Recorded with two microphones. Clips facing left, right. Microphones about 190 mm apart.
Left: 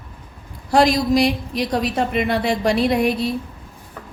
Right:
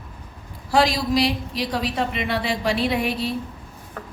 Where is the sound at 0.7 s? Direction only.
50° left (ahead or behind).